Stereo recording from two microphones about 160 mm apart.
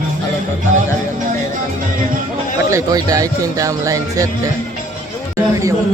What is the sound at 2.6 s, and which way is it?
A man's voice, 20° right (ahead or behind).